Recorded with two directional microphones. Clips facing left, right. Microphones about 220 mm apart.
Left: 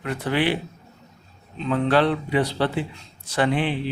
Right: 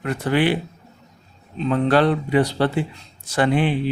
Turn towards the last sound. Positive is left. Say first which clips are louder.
# right 3 dB
turn(degrees=-45)  # may be behind; listen again after turning